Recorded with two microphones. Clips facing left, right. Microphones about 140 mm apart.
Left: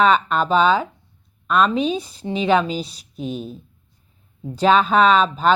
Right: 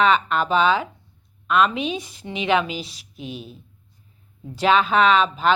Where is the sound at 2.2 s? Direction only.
35° left (ahead or behind).